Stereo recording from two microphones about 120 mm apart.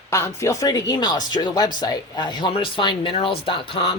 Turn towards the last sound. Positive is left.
turn(degrees=45)  # may be behind; listen again after turning